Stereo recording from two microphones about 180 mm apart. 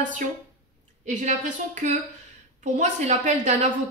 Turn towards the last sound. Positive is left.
turn(degrees=-40)  # may be behind; listen again after turning